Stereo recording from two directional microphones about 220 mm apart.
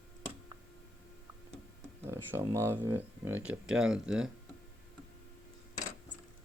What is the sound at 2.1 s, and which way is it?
Speech, 10° right (ahead or behind).